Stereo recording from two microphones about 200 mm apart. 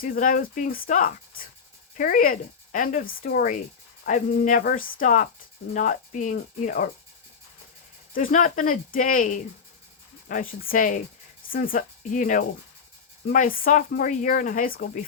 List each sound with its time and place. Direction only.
0.0 s speech: 45° left (ahead or behind)
8.1 s speech: 45° left (ahead or behind)